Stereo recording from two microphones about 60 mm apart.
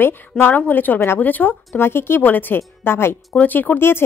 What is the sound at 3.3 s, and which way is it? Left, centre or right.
Speech, left.